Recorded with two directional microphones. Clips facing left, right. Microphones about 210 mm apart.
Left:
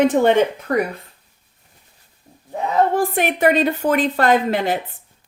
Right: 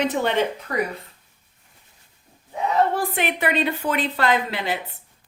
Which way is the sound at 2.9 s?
45° left (ahead or behind).